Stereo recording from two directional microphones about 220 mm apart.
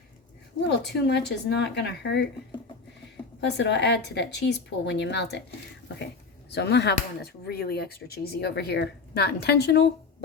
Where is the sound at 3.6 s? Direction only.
50° left (ahead or behind).